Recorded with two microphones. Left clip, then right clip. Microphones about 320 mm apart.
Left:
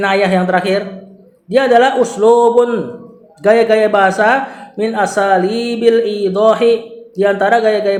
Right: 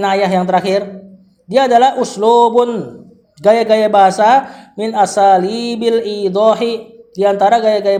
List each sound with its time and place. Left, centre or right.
0.0 s speech: right